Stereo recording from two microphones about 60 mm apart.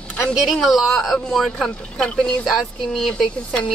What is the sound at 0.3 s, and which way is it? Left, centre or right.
Speech, centre.